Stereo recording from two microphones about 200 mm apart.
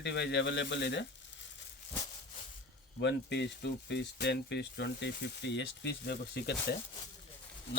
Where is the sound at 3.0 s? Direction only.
60° left (ahead or behind).